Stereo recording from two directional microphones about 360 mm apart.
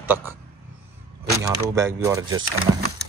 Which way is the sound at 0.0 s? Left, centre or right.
Centre.